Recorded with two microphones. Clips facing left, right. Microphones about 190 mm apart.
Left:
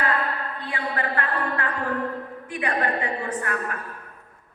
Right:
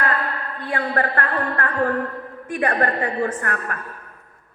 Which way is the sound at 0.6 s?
50° right (ahead or behind).